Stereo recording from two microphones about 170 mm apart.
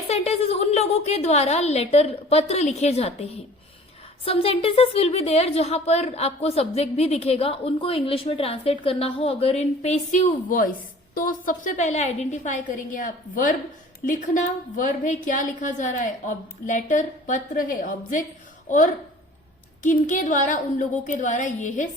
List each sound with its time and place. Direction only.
0.1 s a woman's voice: 40° left (ahead or behind)